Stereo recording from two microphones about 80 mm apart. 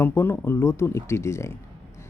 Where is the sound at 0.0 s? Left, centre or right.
Left.